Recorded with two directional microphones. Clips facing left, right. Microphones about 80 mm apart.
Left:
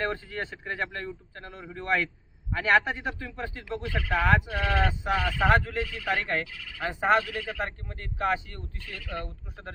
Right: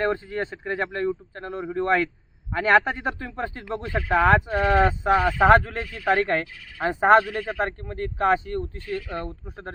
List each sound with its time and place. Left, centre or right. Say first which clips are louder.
0.0 s a man's voice: right 6 dB; right